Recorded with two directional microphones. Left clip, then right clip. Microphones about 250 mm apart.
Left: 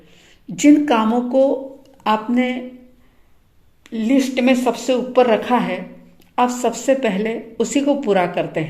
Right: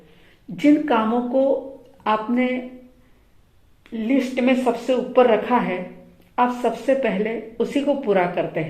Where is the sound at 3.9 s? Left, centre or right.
Left.